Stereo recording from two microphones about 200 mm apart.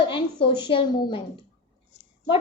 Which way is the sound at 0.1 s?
25° left (ahead or behind).